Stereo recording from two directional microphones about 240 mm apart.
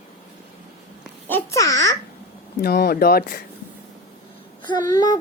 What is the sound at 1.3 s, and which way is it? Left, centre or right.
Babbling, centre.